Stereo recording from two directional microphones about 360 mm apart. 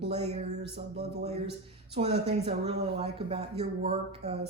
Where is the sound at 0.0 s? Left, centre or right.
Centre.